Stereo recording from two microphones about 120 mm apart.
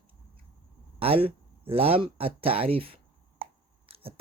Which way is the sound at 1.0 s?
50° right (ahead or behind).